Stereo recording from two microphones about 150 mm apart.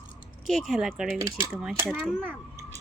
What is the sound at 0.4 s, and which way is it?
Speech, centre (ahead or behind).